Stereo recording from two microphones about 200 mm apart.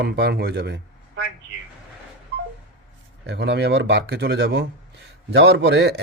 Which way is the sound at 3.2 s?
55° right (ahead or behind).